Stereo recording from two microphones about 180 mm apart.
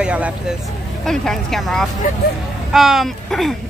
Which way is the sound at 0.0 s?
5° right (ahead or behind).